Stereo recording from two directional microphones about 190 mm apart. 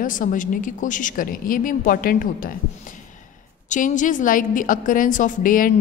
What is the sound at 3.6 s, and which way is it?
A woman's voice, 40° left (ahead or behind).